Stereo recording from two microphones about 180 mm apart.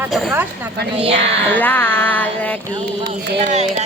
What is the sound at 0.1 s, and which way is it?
Female singing, 5° right (ahead or behind).